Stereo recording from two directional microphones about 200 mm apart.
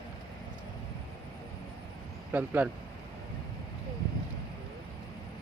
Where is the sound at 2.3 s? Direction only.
10° right (ahead or behind).